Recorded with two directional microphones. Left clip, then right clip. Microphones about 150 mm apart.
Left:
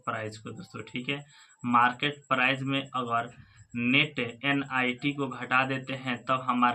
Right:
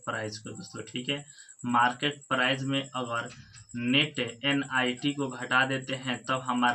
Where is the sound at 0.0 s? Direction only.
25° left (ahead or behind).